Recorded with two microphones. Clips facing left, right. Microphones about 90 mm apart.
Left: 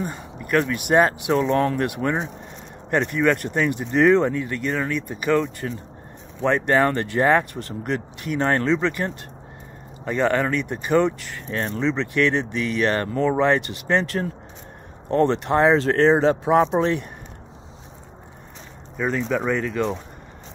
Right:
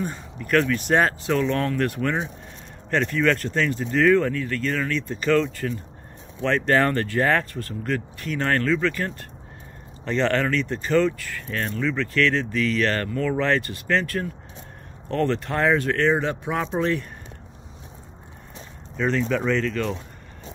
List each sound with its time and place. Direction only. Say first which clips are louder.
0.0 s speech: even; 10° left (ahead or behind)
18.9 s speech: even; 10° left (ahead or behind)